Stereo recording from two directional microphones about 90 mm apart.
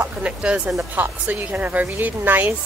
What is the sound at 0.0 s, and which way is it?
A woman's voice, 15° right (ahead or behind).